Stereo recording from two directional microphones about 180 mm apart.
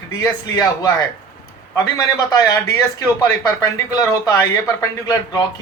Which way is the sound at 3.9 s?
15° left (ahead or behind).